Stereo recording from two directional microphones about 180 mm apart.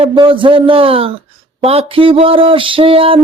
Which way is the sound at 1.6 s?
30° right (ahead or behind).